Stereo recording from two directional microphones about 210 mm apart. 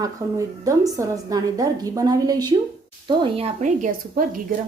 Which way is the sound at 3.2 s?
30° right (ahead or behind).